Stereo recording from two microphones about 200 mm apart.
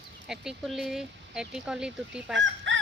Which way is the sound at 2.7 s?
65° right (ahead or behind).